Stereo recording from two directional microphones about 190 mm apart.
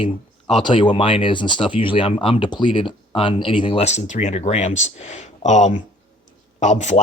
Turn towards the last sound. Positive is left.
turn(degrees=35)  # may be behind; listen again after turning